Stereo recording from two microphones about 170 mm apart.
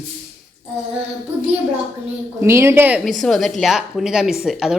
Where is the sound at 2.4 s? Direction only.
15° right (ahead or behind).